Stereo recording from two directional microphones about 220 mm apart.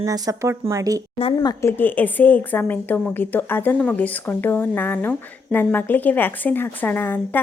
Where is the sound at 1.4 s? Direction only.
15° left (ahead or behind).